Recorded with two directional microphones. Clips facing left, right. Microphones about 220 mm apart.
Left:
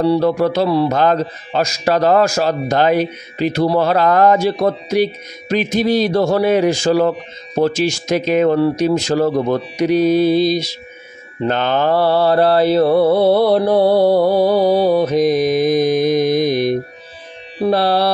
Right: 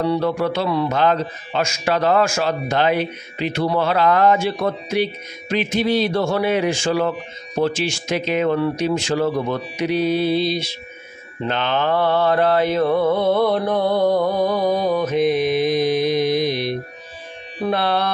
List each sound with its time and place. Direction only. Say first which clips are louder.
0.0 s a man's voice: left 5 dB; 35° left (ahead or behind)
15.2 s mantra: left 4 dB; 40° left (ahead or behind)
17.6 s a man's voice: left 6 dB; 35° left (ahead or behind)